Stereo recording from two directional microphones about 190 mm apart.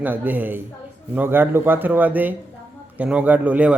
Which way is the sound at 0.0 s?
10° right (ahead or behind).